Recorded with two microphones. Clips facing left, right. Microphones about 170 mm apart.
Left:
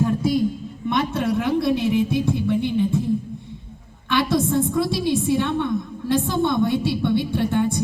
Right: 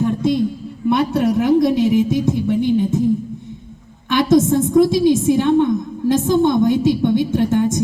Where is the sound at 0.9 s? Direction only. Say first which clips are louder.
Right 6 dB; 35° right (ahead or behind).